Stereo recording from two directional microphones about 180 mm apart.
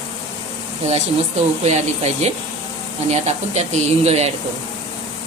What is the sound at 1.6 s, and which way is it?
Speech, 40° right (ahead or behind).